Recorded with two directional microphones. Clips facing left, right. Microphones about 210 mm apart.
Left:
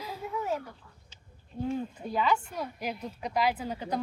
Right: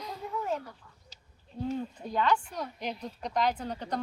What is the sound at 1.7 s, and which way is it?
Speech, 5° left (ahead or behind).